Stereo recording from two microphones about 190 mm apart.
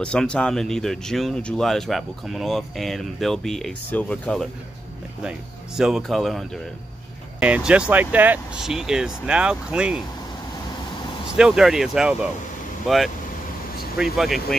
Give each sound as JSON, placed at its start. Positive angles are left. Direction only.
{"t": 0.0, "sound": "speech", "side_deg": 5}
{"t": 5.8, "sound": "speech", "side_deg": 0}
{"t": 11.3, "sound": "speech", "side_deg": -5}